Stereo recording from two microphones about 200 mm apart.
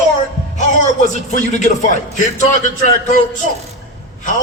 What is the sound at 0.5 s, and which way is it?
A man's voice, 40° left (ahead or behind).